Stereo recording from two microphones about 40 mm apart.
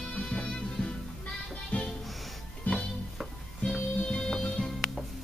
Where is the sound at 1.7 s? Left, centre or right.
Left.